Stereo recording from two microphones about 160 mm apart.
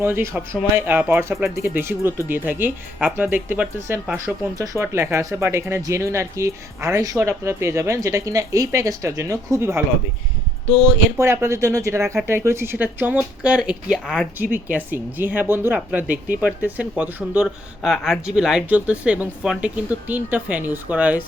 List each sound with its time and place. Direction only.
0.0 s speech: 15° right (ahead or behind)
4.5 s speech: 20° right (ahead or behind)
11.2 s speech: 15° right (ahead or behind)